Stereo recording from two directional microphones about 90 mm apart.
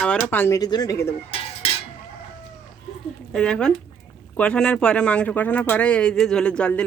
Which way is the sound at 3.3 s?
10° left (ahead or behind).